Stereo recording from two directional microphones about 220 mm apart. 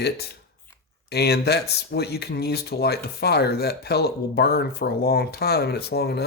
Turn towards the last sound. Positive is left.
turn(degrees=45)  # may be behind; listen again after turning